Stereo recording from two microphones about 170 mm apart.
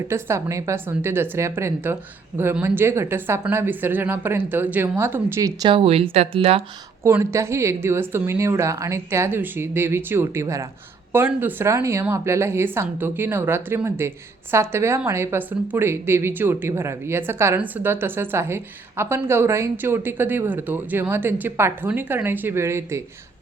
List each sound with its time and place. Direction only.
0.1 s a woman's voice: 15° right (ahead or behind)
5.6 s speech: 30° right (ahead or behind)
7.0 s a woman's voice: 15° right (ahead or behind)